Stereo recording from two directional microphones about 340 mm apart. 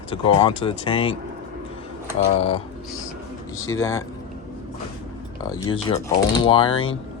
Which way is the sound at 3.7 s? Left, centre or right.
Centre.